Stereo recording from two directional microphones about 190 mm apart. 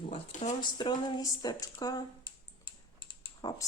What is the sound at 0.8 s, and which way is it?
A woman's voice, 25° left (ahead or behind).